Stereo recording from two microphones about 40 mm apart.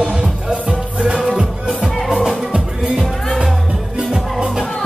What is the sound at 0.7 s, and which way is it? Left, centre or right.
Music, right.